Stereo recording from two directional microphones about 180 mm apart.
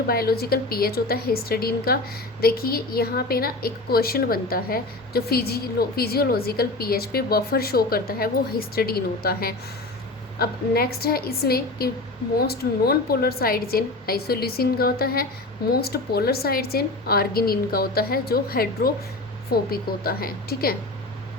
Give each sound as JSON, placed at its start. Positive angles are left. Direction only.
{"t": 0.1, "sound": "a woman's voice", "side_deg": 60}